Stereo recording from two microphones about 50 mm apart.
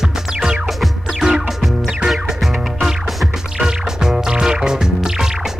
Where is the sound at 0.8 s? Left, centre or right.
Centre.